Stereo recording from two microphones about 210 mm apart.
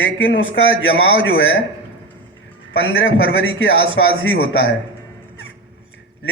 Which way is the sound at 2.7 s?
65° left (ahead or behind).